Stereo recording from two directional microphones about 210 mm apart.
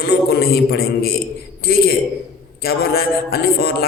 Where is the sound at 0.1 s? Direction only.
50° left (ahead or behind).